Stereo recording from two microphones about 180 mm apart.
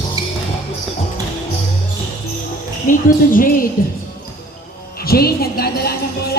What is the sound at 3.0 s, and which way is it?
Speech, 50° left (ahead or behind).